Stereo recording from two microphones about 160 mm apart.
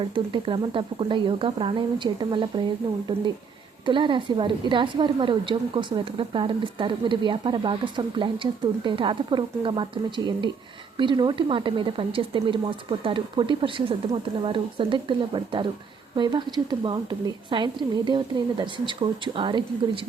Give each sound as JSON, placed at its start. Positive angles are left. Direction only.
{"t": 0.0, "sound": "a woman's voice", "side_deg": -30}